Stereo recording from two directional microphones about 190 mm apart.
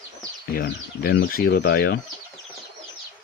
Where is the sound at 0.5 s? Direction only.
55° left (ahead or behind).